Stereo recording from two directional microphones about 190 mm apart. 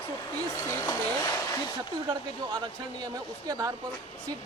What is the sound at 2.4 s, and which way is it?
Speech, 25° right (ahead or behind).